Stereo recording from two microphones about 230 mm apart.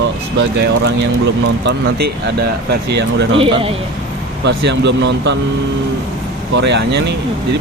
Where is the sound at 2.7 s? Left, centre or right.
Right.